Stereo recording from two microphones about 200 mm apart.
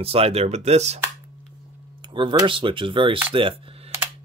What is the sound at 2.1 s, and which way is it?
Speech, 25° right (ahead or behind).